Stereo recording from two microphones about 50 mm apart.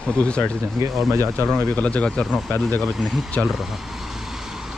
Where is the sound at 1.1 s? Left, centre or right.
Right.